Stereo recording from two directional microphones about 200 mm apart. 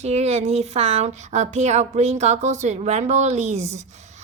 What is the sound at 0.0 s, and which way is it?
A woman's voice, 30° right (ahead or behind).